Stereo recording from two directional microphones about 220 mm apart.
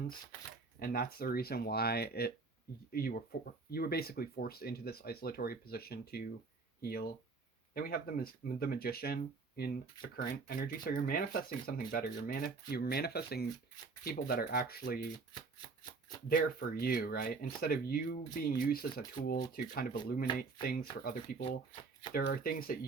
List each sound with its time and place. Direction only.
0.8 s speech: 40° left (ahead or behind)
16.3 s speech: 40° left (ahead or behind)